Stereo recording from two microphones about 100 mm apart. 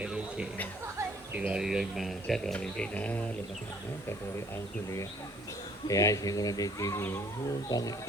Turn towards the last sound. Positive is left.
turn(degrees=40)  # may be behind; listen again after turning